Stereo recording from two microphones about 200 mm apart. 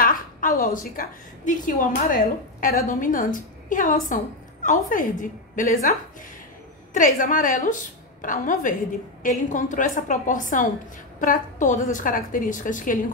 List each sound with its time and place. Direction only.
0.0 s a sound: 45° left (ahead or behind)
0.9 s a woman's voice: 40° left (ahead or behind)
6.9 s a woman's voice: 40° left (ahead or behind)